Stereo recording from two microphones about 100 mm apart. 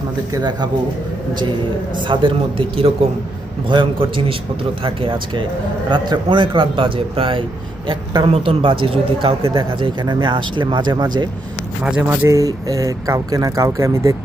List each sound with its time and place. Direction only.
2.0 s speech: 60° right (ahead or behind)
9.6 s speech: 55° right (ahead or behind)
11.8 s speech: 15° right (ahead or behind)
12.4 s speech: 35° right (ahead or behind)